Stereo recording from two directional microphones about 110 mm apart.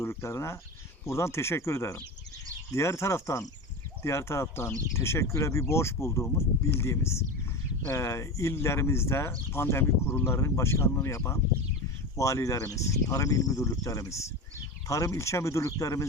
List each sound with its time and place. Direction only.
0.0 s speech: 25° left (ahead or behind)